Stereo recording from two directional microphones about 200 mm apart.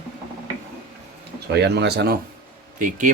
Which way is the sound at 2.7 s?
40° right (ahead or behind).